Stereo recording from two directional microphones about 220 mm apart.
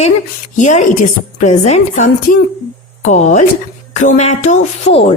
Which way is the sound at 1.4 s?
30° left (ahead or behind).